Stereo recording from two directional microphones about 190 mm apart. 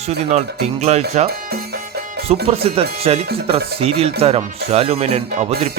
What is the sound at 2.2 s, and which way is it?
Speech, 30° right (ahead or behind).